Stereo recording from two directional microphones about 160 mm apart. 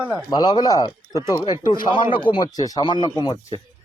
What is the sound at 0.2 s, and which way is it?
Speech, 25° left (ahead or behind).